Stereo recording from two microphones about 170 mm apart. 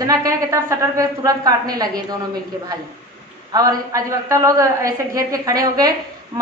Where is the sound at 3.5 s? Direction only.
20° right (ahead or behind).